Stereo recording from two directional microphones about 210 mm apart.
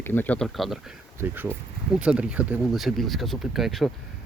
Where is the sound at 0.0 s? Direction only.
10° left (ahead or behind).